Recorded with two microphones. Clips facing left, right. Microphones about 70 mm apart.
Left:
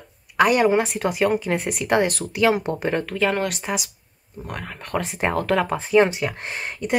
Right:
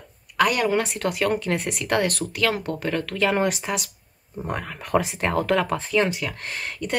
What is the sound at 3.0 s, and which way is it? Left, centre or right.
Speech, centre.